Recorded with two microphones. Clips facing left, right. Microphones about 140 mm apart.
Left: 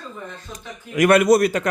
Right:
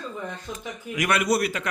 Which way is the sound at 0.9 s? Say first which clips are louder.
Left 9 dB; 50° left (ahead or behind).